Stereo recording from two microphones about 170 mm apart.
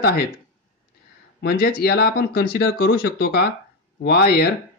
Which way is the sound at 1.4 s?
65° left (ahead or behind).